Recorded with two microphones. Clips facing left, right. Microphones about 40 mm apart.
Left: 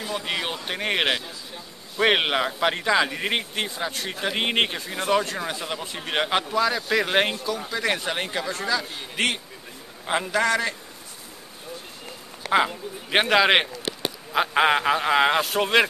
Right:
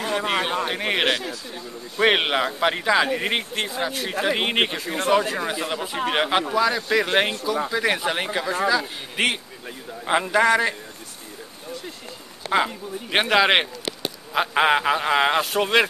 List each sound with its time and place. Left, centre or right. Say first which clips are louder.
0.0 s a sound: right 5 dB; right
0.3 s speech: right 3 dB; right
0.7 s a man's voice: right 2 dB; centre
12.4 s speech: even; centre